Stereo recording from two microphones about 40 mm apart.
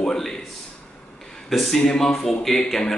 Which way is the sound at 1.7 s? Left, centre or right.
Centre.